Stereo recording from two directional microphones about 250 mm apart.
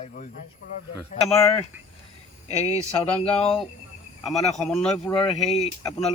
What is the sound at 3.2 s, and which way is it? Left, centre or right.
Speech, left.